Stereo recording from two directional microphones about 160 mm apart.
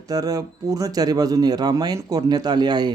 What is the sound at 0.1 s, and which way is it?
A man's voice, 25° right (ahead or behind).